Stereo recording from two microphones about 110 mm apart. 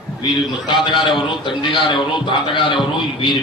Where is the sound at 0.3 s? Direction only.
45° left (ahead or behind).